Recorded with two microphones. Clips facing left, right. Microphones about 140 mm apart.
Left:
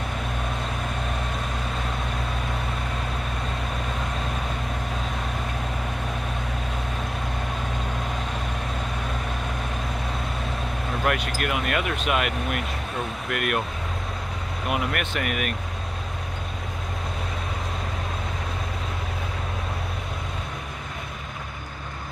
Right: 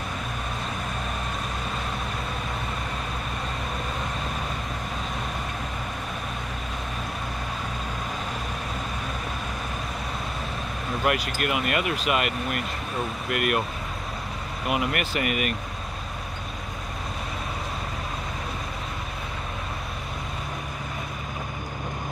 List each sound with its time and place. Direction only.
11.1 s speech: 5° right (ahead or behind)
14.7 s speech: 5° right (ahead or behind)